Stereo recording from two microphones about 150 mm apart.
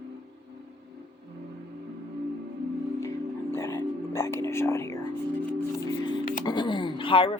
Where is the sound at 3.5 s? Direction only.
20° left (ahead or behind).